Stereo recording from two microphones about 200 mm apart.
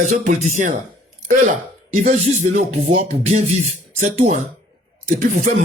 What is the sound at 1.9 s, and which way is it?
Speech, 35° right (ahead or behind).